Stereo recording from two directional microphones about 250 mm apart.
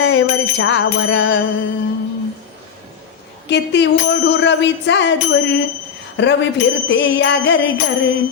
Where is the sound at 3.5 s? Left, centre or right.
Left.